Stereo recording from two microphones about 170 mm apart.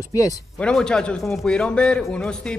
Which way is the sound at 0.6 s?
5° left (ahead or behind).